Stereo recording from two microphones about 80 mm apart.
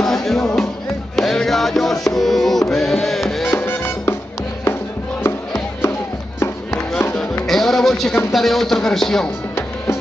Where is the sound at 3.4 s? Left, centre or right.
Left.